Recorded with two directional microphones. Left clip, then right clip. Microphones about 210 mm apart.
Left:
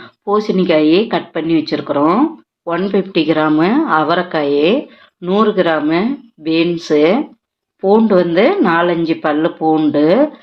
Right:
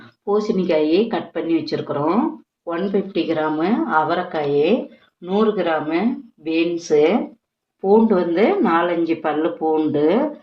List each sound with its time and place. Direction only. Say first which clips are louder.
0.3 s speech: left 5 dB; 40° left (ahead or behind)